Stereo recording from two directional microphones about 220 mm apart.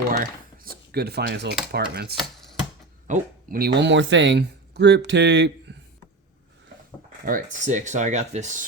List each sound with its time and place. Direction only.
0.2 s speech: 40° right (ahead or behind)
7.3 s speech: 35° right (ahead or behind)